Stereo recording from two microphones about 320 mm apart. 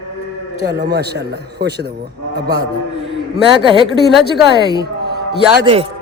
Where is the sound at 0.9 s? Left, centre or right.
Right.